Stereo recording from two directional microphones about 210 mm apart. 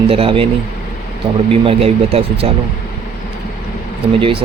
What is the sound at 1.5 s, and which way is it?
Speech, 30° right (ahead or behind).